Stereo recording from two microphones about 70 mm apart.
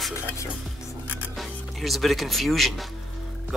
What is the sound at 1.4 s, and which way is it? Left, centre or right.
Speech, centre.